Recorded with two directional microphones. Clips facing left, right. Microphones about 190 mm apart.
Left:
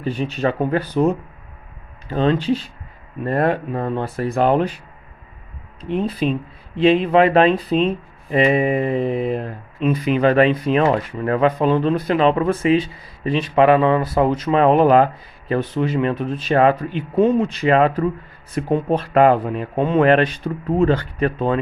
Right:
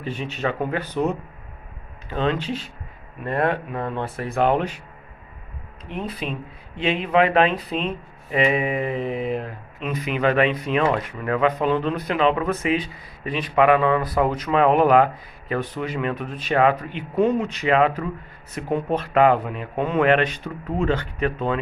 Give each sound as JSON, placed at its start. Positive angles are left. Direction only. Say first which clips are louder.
{"t": 0.0, "sound": "speech", "louder": "left 6 dB", "side_deg": 35}
{"t": 5.9, "sound": "speech", "louder": "left 9 dB", "side_deg": 30}